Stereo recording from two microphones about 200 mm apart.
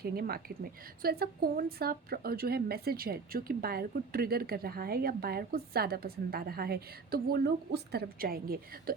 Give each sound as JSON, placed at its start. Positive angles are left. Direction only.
{"t": 0.0, "sound": "a woman's voice", "side_deg": -50}